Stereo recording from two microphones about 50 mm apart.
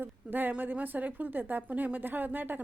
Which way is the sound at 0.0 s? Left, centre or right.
Right.